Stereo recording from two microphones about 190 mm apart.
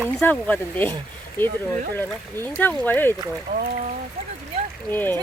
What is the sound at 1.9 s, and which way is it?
Speech, 10° left (ahead or behind).